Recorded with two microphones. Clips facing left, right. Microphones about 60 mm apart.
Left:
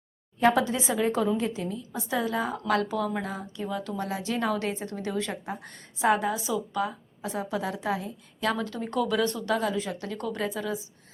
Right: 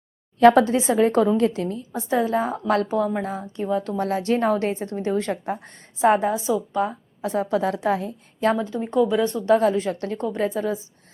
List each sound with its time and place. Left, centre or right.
0.3 s a woman's voice: right
1.9 s a woman's voice: right
5.6 s a woman's voice: right
7.2 s a woman's voice: right
8.4 s speech: right
8.6 s speech: centre
9.6 s a woman's voice: right
10.2 s a woman's voice: right